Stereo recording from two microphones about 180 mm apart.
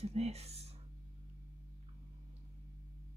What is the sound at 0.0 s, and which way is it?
Speech, 35° right (ahead or behind).